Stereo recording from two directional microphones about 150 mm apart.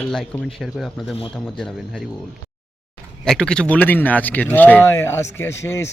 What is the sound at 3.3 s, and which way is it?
Speech, 5° left (ahead or behind).